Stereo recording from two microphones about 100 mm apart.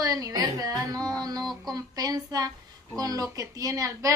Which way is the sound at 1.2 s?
40° right (ahead or behind).